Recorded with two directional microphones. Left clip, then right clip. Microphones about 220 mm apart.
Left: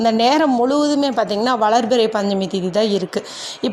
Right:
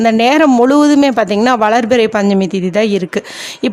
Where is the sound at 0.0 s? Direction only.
25° right (ahead or behind).